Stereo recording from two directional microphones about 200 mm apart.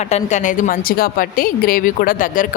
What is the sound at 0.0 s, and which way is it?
A woman's voice, 35° left (ahead or behind).